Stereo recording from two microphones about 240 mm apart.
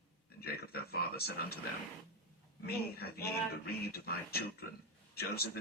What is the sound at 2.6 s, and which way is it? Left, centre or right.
Speech, left.